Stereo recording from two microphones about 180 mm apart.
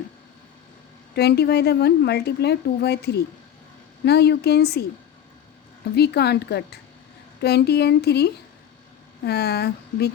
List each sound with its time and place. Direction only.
1.1 s a woman's voice: 65° left (ahead or behind)
5.9 s a woman's voice: 65° left (ahead or behind)